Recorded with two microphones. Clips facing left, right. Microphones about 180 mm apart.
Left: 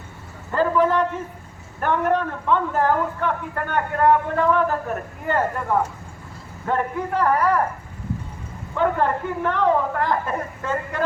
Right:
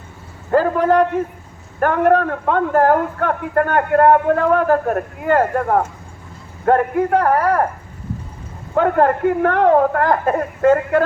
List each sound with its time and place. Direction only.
0.5 s a man's voice: 50° right (ahead or behind)
8.7 s a woman's voice: 50° right (ahead or behind)